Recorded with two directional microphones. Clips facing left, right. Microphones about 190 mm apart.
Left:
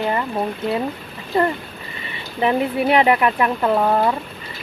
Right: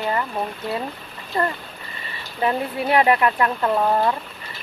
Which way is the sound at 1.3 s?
25° left (ahead or behind).